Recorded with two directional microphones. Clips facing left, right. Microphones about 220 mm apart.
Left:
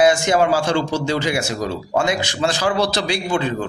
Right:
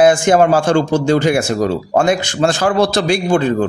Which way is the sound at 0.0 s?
50° right (ahead or behind).